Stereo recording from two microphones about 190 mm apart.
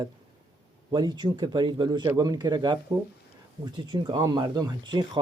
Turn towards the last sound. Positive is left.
turn(degrees=-25)  # may be behind; listen again after turning